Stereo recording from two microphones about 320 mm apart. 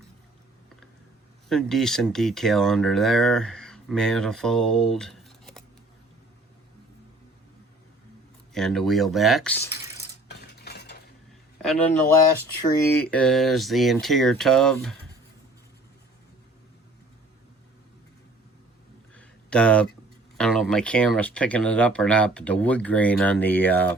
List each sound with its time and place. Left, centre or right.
1.5 s speech: centre
8.5 s speech: centre
10.6 s cutlery: left
11.6 s speech: centre
19.1 s a sound: centre
20.4 s speech: centre